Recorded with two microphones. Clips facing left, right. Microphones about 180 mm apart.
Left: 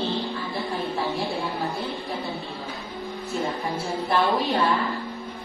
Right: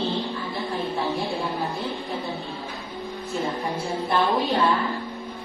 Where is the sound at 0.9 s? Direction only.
Centre (ahead or behind).